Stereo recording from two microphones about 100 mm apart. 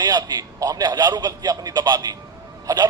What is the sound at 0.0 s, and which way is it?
A man's voice, 45° right (ahead or behind).